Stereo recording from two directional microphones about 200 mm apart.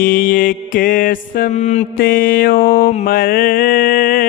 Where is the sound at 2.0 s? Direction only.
45° left (ahead or behind).